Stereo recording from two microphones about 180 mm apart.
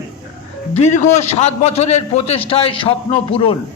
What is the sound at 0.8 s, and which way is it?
A man's voice, 40° left (ahead or behind).